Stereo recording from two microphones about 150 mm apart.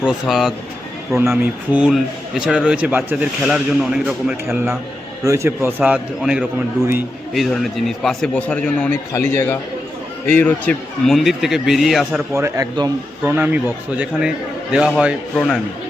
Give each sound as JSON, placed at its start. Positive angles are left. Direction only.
{"t": 0.0, "sound": "a man's voice", "side_deg": -5}
{"t": 5.2, "sound": "a man's voice", "side_deg": -20}
{"t": 12.3, "sound": "a man's voice", "side_deg": -20}
{"t": 13.2, "sound": "a man's voice", "side_deg": -10}